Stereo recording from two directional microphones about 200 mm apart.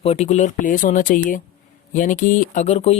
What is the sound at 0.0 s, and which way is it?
Speech, 30° left (ahead or behind).